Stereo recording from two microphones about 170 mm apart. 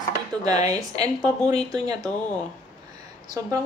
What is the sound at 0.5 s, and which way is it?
Speech, 20° right (ahead or behind).